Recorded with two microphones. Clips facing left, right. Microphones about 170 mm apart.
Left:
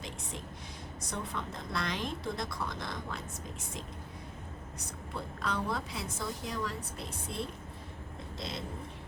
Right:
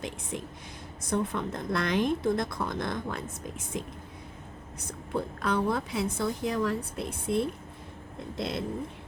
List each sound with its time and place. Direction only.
0.0 s a woman's voice: 55° right (ahead or behind)
5.1 s a woman's voice: 55° right (ahead or behind)